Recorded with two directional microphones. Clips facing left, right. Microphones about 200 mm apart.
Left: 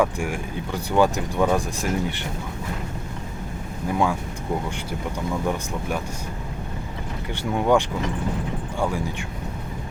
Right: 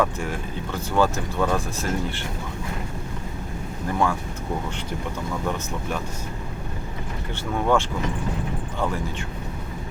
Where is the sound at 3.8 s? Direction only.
15° left (ahead or behind).